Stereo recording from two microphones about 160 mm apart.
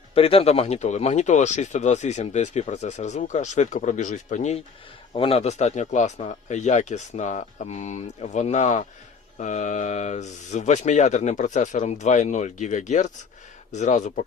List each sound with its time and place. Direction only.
0.1 s speech: 35° left (ahead or behind)
5.1 s speech: 35° left (ahead or behind); by 14.3 s 50° left (ahead or behind)